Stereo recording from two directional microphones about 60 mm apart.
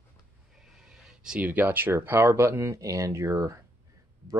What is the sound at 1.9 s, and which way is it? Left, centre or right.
Speech, right.